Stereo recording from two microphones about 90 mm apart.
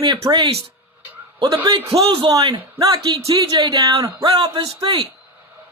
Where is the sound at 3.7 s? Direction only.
45° right (ahead or behind).